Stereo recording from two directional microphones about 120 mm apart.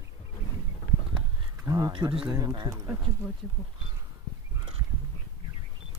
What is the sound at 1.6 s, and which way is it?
Speech, 35° right (ahead or behind).